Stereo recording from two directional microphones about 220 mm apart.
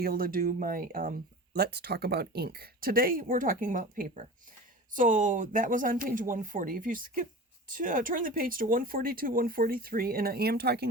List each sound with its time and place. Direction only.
0.0 s speech: 40° right (ahead or behind)